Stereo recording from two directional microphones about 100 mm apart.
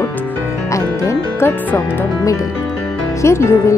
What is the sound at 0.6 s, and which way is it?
Music, 30° left (ahead or behind).